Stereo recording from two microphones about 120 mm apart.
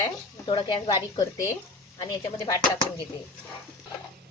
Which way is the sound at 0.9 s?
30° left (ahead or behind).